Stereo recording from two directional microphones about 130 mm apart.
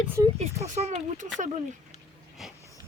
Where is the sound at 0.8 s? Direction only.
55° right (ahead or behind).